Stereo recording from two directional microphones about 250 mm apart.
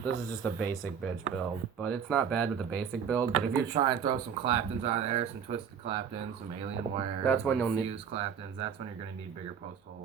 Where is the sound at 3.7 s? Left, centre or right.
Centre.